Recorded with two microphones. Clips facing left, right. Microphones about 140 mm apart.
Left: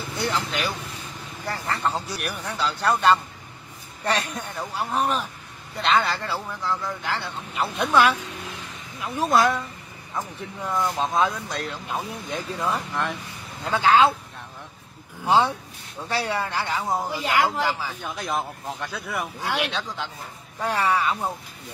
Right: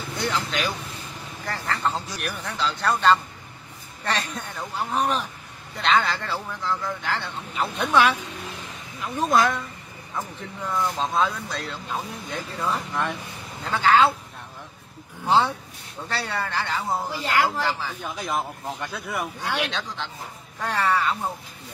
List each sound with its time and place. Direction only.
0.5 s speech: 5° left (ahead or behind)
7.5 s speech: centre (ahead or behind)
10.8 s speech: 15° left (ahead or behind)
12.9 s speech: centre (ahead or behind)
13.7 s speech: 15° left (ahead or behind)
15.2 s speech: 15° left (ahead or behind)
18.0 s speech: centre (ahead or behind)